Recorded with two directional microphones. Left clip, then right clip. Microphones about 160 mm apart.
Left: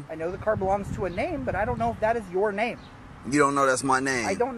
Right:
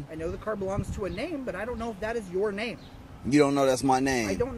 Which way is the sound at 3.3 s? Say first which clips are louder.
Left 1 dB; 75° right (ahead or behind).